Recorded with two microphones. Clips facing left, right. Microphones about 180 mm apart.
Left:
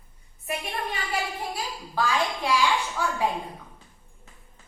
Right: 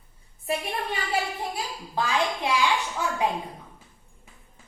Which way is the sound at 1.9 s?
20° right (ahead or behind).